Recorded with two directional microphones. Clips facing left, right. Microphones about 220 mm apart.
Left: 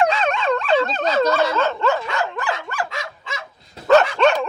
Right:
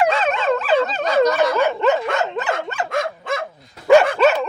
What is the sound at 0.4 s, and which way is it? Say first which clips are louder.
Dog: right 1 dB; 5° right (ahead or behind).